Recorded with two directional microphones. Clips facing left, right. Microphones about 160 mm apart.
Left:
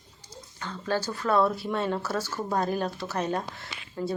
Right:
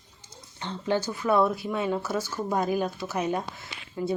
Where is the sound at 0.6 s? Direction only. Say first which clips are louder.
Right 2 dB; 20° right (ahead or behind).